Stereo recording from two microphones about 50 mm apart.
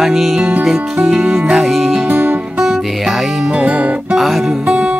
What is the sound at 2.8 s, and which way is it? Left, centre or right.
Music, centre.